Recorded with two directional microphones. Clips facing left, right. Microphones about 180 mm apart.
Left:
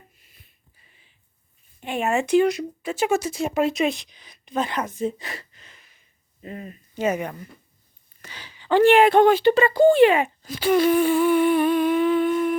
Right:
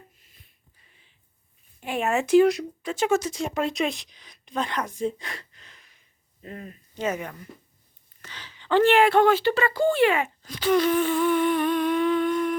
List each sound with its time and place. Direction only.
1.8 s a woman's voice: centre (ahead or behind); by 10.3 s 20° left (ahead or behind)
10.4 s humming: 10° left (ahead or behind)